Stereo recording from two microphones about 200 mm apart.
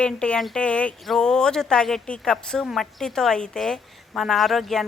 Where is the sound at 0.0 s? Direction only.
5° left (ahead or behind).